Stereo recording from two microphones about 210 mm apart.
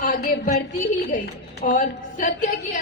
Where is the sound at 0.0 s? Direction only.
40° left (ahead or behind).